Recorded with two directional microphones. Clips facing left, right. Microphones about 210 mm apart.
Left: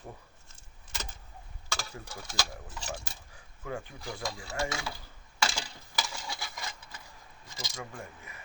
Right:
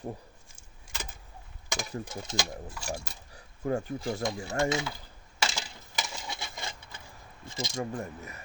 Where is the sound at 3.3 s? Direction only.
40° right (ahead or behind).